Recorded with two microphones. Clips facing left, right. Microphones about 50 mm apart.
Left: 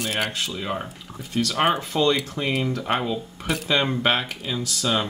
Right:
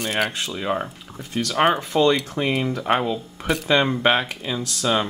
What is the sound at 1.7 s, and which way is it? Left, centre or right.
Speech, right.